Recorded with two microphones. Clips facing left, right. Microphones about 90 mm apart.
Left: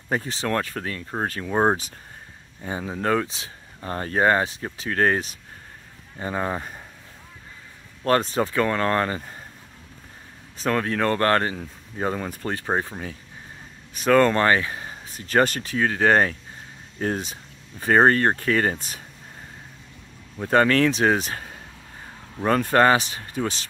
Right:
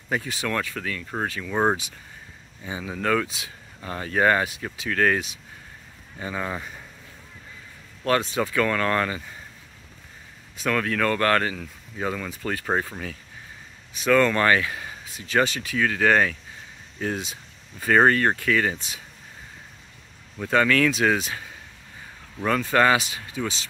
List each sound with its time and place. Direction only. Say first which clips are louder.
0.1 s speech: left 2 dB; 35° left (ahead or behind)
2.6 s speech: left 3 dB; 45° left (ahead or behind)
2.9 s speech: even; 30° left (ahead or behind)
8.0 s speech: left 2 dB; 40° left (ahead or behind)
10.6 s speech: left 1 dB; 30° left (ahead or behind)
12.6 s speech: even; 20° left (ahead or behind)
13.9 s speech: left 2 dB; 40° left (ahead or behind)
20.4 s speech: left 2 dB; 35° left (ahead or behind)